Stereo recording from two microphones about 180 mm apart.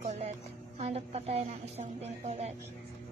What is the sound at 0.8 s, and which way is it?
A woman's voice, 35° right (ahead or behind).